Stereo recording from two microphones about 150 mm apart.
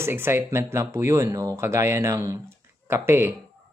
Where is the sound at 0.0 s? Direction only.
15° right (ahead or behind).